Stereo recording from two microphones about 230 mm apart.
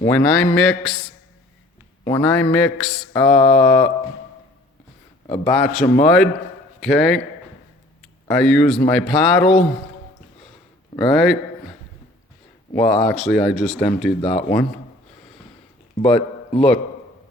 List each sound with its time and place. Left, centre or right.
0.0 s speech: centre
2.0 s speech: centre
5.5 s a man's voice: centre
8.3 s speech: centre
10.9 s speech: centre
12.7 s speech: centre
16.0 s a man's voice: left